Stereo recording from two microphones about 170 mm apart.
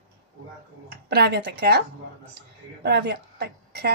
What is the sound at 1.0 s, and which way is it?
Speech, 70° right (ahead or behind).